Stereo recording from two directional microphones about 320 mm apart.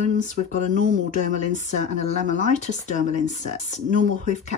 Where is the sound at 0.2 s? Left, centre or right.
Left.